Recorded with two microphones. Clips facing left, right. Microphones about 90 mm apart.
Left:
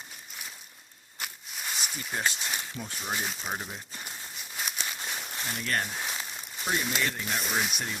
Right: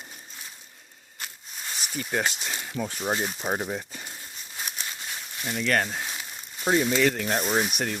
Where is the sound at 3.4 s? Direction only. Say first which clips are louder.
Right 7 dB; 45° right (ahead or behind).